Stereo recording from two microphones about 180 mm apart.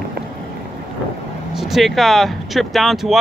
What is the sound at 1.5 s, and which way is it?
Speech, centre (ahead or behind).